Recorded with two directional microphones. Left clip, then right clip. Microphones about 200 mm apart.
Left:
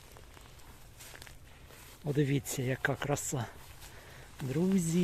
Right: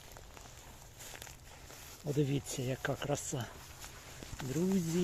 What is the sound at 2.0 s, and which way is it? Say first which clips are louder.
Speech: left 3 dB; 35° left (ahead or behind).